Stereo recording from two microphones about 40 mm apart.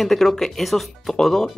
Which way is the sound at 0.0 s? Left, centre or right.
Centre.